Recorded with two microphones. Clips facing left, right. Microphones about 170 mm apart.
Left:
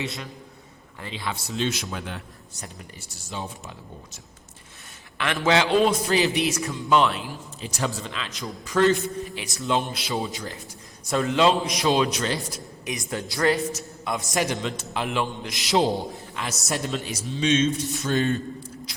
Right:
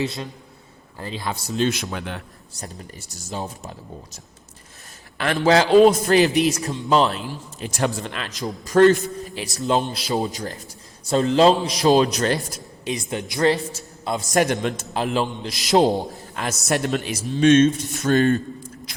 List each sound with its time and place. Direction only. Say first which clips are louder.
0.9 s a man's voice: right 3 dB; 40° right (ahead or behind); by 2.2 s 60° right (ahead or behind)
2.6 s a man's voice: right 5 dB; 40° right (ahead or behind)
7.6 s a man's voice: right 5 dB; 55° right (ahead or behind)
13.1 s a woman's voice: right 3 dB; 20° right (ahead or behind)
14.3 s a man's voice: right 7 dB; 55° right (ahead or behind)
14.9 s a man's voice: right 3 dB; 35° right (ahead or behind); by 17.2 s 65° right (ahead or behind)
17.4 s a man's voice: right 7 dB; 55° right (ahead or behind)